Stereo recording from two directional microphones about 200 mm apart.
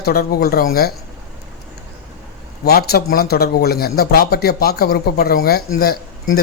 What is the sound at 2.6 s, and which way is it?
A man's voice, 50° left (ahead or behind).